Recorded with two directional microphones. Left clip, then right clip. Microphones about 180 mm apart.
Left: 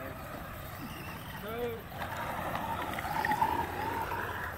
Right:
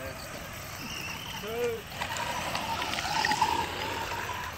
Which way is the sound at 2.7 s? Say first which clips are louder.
Right 4 dB; 15° left (ahead or behind).